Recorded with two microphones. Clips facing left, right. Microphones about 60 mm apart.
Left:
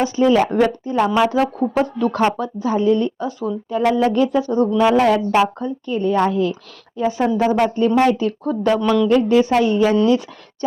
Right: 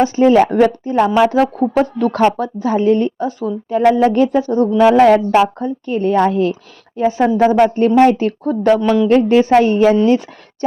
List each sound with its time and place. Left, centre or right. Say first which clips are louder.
0.0 s a woman's voice: right 4 dB; right
7.0 s speech: right 5 dB; right
7.8 s a woman's voice: right 5 dB; right